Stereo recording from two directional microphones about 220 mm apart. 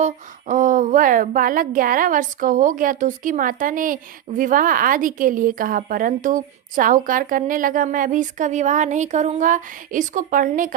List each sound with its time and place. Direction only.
0.0 s a woman's voice: 35° right (ahead or behind)